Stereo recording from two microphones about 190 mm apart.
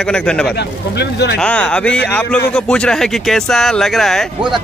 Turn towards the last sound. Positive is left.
turn(degrees=0)  # may be behind; listen again after turning